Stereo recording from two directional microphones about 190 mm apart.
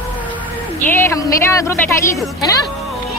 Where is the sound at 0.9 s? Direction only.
15° left (ahead or behind).